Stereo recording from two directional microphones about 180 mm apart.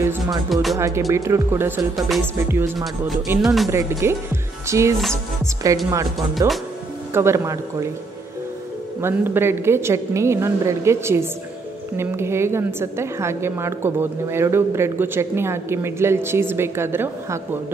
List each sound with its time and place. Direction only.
0.0 s speech: 15° right (ahead or behind)
0.5 s speech: centre (ahead or behind)
0.7 s a woman's voice: 15° right (ahead or behind)
2.0 s speech: centre (ahead or behind)
2.3 s a woman's voice: 15° right (ahead or behind)
2.8 s speech: centre (ahead or behind)
3.7 s a woman's voice: 15° right (ahead or behind)
6.1 s speech: centre (ahead or behind)
7.2 s a woman's voice: 15° right (ahead or behind)
9.0 s a woman's voice: 10° right (ahead or behind)